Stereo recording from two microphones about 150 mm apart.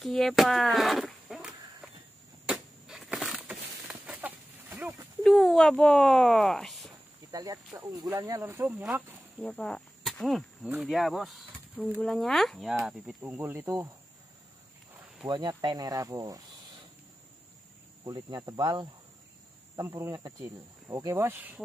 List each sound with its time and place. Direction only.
0.0 s a sound: centre (ahead or behind)
5.2 s speech: centre (ahead or behind)
7.2 s speech: 25° right (ahead or behind)
9.4 s speech: 5° left (ahead or behind)
13.2 s speech: 15° right (ahead or behind)
15.2 s cricket: 30° right (ahead or behind)
18.0 s cricket: 25° right (ahead or behind)
19.7 s speech: 25° right (ahead or behind)